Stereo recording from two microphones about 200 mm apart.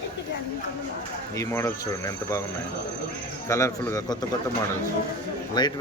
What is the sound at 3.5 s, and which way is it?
Speech, 15° left (ahead or behind).